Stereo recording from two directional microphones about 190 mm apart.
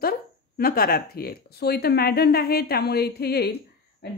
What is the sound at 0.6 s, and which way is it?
Speech, 50° left (ahead or behind).